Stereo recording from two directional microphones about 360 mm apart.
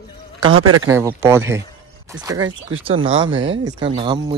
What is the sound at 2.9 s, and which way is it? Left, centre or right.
Speech, right.